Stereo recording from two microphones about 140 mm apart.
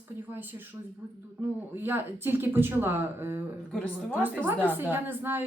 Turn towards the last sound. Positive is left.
turn(degrees=-15)  # may be behind; listen again after turning